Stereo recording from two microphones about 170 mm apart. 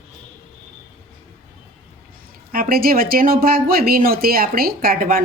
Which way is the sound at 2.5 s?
60° right (ahead or behind).